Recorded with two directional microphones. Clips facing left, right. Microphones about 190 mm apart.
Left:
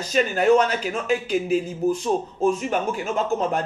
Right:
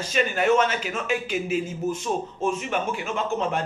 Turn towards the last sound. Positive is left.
turn(degrees=40)  # may be behind; listen again after turning